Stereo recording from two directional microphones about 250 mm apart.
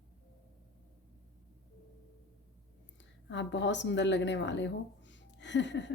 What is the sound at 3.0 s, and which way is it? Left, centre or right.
Speech, left.